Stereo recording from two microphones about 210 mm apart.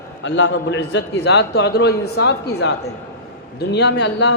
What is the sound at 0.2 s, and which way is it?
A man's voice, 60° left (ahead or behind).